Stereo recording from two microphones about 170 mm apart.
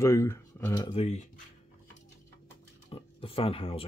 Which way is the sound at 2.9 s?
35° left (ahead or behind).